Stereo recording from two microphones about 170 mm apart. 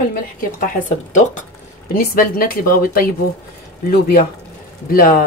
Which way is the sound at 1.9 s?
60° left (ahead or behind).